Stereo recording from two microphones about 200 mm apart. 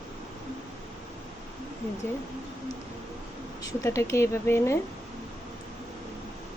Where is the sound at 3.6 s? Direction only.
15° left (ahead or behind).